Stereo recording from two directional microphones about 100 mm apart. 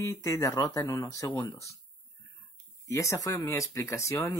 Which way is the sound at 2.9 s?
30° left (ahead or behind).